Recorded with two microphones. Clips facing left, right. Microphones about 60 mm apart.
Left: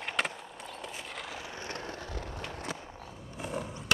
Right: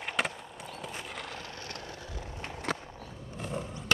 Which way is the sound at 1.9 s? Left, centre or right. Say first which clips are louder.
Left 3 dB; left.